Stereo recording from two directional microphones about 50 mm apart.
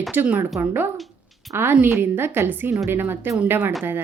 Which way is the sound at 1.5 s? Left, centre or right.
Right.